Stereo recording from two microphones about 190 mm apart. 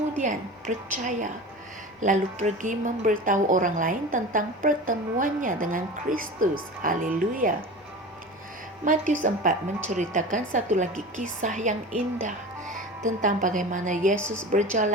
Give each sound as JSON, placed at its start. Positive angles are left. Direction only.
{"t": 0.2, "sound": "a woman's voice", "side_deg": -40}
{"t": 8.8, "sound": "a woman's voice", "side_deg": -40}